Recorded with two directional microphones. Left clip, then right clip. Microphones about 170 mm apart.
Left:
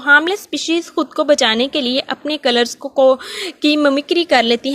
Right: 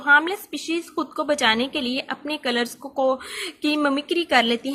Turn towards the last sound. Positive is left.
turn(degrees=40)  # may be behind; listen again after turning